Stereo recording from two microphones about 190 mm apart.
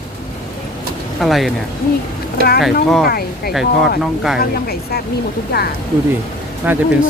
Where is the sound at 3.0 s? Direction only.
55° left (ahead or behind).